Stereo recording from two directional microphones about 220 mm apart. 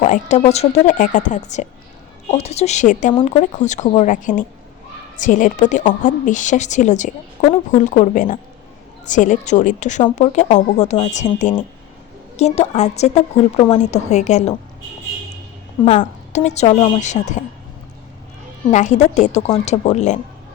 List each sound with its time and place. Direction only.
0.0 s a woman's voice: 30° left (ahead or behind)
15.8 s a woman's voice: 30° left (ahead or behind)
18.7 s a woman's voice: 35° left (ahead or behind)